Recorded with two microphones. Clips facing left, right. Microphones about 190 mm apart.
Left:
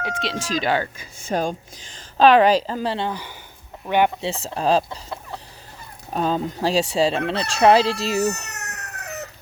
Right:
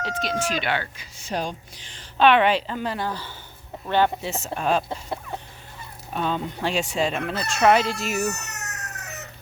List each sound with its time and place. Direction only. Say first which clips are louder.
0.3 s speech: right 5 dB; 90° left
0.5 s speech: left 5 dB; 40° left (ahead or behind); by 4.1 s 15° left (ahead or behind)
4.2 s speech: left 3 dB; 30° left (ahead or behind)
6.1 s speech: left 4 dB; 35° left (ahead or behind)
8.5 s a sound: left 1 dB; 60° left (ahead or behind)